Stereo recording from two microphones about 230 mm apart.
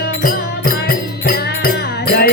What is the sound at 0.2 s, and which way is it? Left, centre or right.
Music, left.